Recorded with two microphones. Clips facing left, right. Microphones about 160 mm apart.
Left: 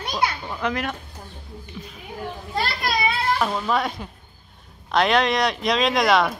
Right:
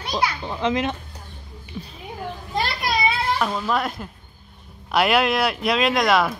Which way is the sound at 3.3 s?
Centre (ahead or behind).